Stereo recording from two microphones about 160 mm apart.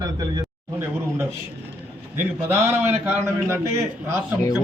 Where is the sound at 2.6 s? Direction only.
15° right (ahead or behind).